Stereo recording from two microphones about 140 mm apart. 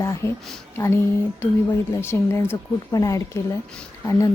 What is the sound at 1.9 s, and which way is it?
Speech, 20° left (ahead or behind).